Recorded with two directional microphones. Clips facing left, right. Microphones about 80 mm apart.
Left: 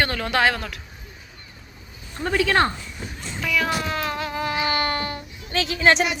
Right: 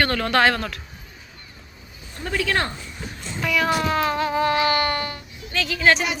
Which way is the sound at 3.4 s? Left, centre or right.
Centre.